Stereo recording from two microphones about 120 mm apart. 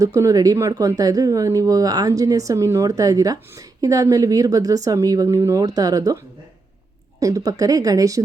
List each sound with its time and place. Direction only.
0.0 s speech: 25° right (ahead or behind)
7.2 s speech: 25° right (ahead or behind)